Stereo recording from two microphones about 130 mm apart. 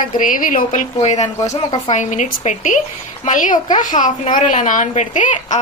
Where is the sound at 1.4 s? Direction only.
25° left (ahead or behind).